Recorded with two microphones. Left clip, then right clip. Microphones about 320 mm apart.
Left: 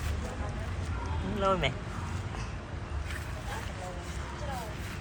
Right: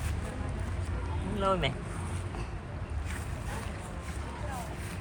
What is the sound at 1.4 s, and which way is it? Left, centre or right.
Speech, centre.